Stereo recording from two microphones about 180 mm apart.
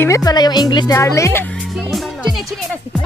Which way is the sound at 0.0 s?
20° left (ahead or behind).